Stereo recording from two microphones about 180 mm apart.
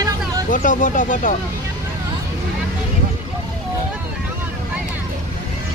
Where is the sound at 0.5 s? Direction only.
45° left (ahead or behind).